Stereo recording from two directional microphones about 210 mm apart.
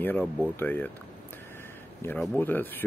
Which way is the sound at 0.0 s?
10° left (ahead or behind).